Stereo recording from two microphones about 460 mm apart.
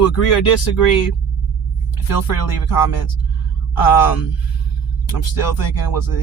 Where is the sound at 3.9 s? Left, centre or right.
Left.